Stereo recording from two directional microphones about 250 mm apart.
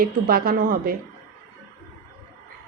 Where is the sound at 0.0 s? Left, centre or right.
Right.